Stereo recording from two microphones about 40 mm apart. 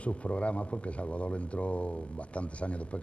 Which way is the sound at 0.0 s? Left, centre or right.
Left.